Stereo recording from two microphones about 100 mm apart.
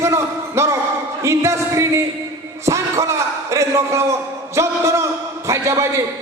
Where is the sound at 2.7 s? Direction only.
30° right (ahead or behind).